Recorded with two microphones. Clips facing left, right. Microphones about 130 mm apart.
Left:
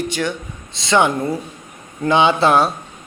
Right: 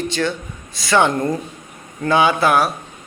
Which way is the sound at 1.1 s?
5° left (ahead or behind).